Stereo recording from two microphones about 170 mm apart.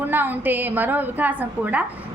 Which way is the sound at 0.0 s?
10° right (ahead or behind).